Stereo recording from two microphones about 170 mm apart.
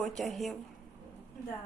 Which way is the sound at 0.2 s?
Centre (ahead or behind).